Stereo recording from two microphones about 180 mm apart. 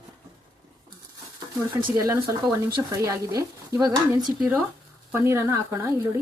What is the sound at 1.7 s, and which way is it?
Speech, 20° right (ahead or behind).